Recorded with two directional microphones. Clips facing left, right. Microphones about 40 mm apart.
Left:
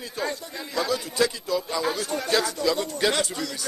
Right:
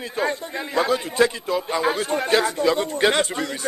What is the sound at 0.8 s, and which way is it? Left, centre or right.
A man's voice, right.